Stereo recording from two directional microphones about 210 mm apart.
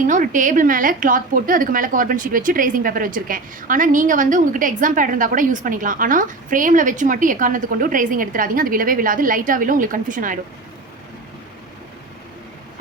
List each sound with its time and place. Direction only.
0.1 s a woman's voice: 40° right (ahead or behind)